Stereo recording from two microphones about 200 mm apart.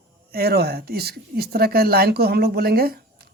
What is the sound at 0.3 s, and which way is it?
Speech, 50° right (ahead or behind).